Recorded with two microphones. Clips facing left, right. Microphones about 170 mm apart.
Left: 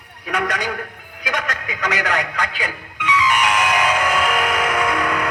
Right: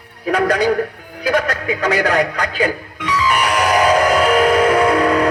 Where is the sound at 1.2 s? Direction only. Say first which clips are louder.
Right 8 dB; 35° right (ahead or behind).